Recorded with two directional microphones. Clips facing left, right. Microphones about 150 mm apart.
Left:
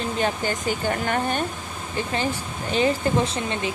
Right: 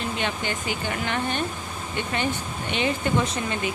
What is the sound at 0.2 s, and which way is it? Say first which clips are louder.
Speech: left 4 dB; 40° left (ahead or behind).